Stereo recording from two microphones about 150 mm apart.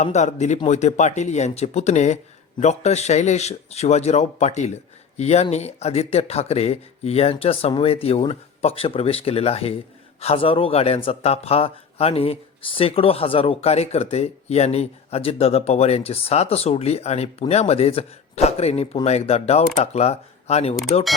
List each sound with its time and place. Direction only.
0.0 s speech: 50° left (ahead or behind)